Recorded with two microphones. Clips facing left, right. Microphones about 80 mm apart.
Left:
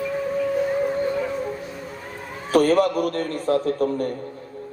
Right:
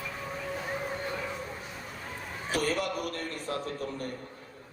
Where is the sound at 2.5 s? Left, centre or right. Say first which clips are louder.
Left 13 dB; left.